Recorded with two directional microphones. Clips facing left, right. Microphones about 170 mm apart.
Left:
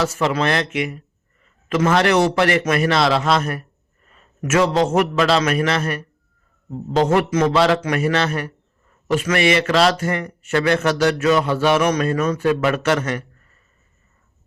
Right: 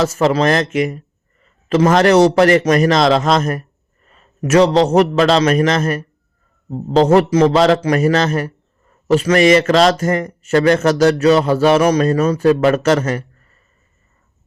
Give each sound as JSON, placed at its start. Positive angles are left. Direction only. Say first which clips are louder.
{"t": 0.0, "sound": "a man's voice", "louder": "right 5 dB", "side_deg": -40}
{"t": 4.1, "sound": "a sound", "louder": "right 6 dB", "side_deg": -35}
{"t": 4.9, "sound": "a man's voice", "louder": "right 5 dB", "side_deg": -35}